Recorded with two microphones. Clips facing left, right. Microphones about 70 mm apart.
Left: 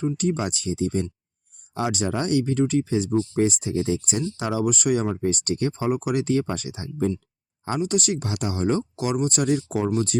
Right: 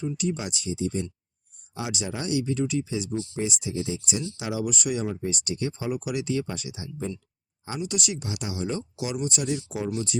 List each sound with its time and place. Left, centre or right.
0.2 s speech: left